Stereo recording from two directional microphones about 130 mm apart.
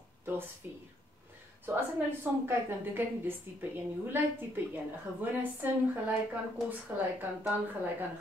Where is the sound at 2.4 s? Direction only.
15° right (ahead or behind).